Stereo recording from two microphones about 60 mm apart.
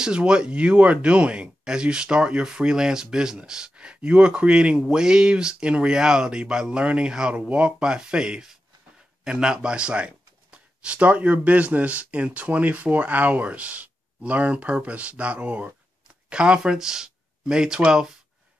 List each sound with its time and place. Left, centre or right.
0.0 s speech: centre